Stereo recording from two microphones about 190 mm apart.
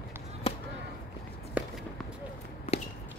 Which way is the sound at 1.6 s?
5° right (ahead or behind).